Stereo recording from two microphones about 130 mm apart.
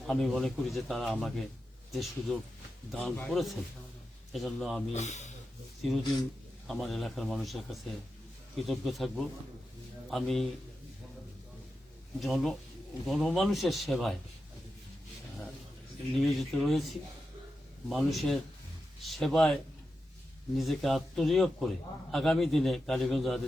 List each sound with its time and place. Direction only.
0.1 s a man's voice: centre (ahead or behind)
4.9 s speech: 65° left (ahead or behind)
5.8 s a man's voice: centre (ahead or behind)
12.2 s a man's voice: centre (ahead or behind)
16.1 s a man's voice: centre (ahead or behind)
20.6 s a man's voice: centre (ahead or behind)